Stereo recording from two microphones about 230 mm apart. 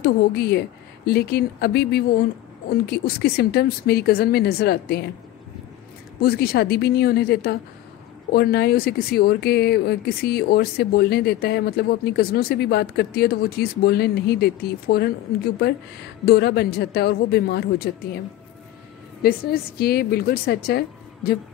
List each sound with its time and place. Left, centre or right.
0.0 s speech: left
6.2 s speech: left
16.3 s speech: left
19.2 s speech: left